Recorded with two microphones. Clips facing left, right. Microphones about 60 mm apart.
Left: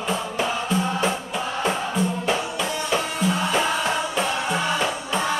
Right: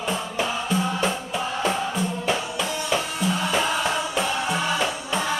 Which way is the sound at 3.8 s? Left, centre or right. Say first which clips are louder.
Left 1 dB; centre.